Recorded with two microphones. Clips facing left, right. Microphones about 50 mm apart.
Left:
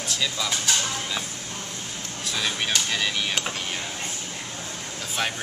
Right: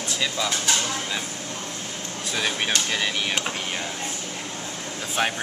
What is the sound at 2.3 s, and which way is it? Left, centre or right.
Speech, centre.